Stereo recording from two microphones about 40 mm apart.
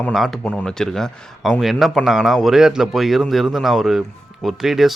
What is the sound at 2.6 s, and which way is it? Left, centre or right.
Speech, centre.